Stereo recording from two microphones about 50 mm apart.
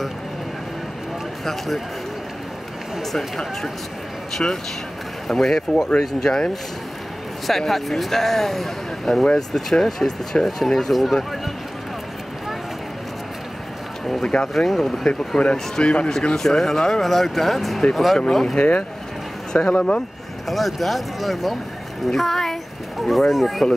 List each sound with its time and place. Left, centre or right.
1.4 s speech: centre
3.0 s speech: centre
5.3 s speech: centre
7.4 s speech: centre
14.2 s speech: centre
14.5 s speech: centre
18.6 s speech: left
20.4 s speech: centre